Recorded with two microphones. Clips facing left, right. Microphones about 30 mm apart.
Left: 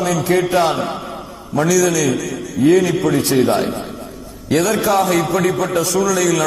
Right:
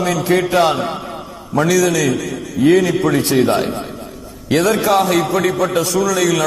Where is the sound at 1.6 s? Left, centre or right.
Centre.